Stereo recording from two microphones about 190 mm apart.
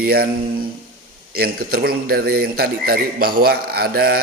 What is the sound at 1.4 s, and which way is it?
A man's voice, 55° right (ahead or behind).